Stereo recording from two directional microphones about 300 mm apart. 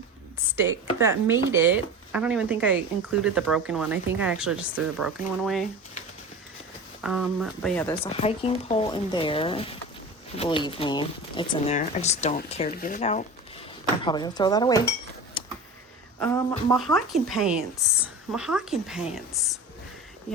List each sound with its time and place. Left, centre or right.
0.5 s speech: centre
7.0 s speech: centre
7.9 s speech: centre
15.4 s a sound: centre
16.2 s speech: centre